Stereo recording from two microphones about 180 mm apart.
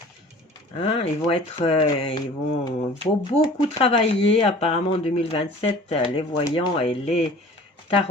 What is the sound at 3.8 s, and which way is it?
Speech, 30° left (ahead or behind).